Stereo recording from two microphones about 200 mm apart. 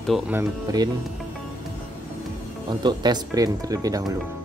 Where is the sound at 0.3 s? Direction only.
15° right (ahead or behind).